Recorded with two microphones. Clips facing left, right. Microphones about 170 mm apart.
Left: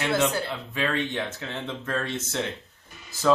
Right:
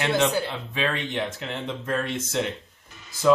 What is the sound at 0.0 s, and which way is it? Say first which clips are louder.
Speech: right 2 dB; 20° right (ahead or behind).